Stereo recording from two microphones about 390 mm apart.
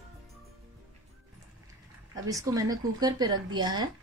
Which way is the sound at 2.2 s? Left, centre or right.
Centre.